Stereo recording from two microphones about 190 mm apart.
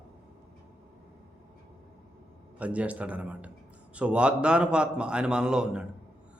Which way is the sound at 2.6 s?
5° right (ahead or behind).